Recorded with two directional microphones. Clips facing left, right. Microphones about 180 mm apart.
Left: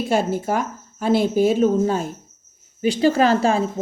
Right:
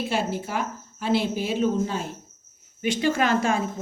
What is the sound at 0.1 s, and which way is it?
Speech, 45° left (ahead or behind).